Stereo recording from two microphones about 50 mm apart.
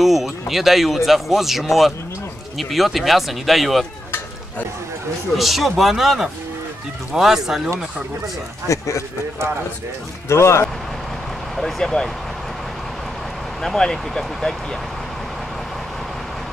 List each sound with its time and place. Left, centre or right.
0.0 s speech: centre
5.4 s speech: centre
8.6 s speech: left
10.2 s speech: left
11.5 s speech: centre
13.6 s speech: centre